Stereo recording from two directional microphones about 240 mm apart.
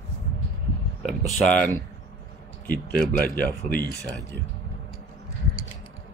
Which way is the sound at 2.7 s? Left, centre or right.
Centre.